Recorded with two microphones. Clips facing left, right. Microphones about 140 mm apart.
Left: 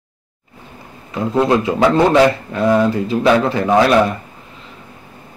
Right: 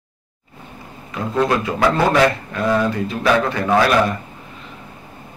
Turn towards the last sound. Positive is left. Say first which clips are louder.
# left 3 dB
turn(degrees=25)  # may be behind; listen again after turning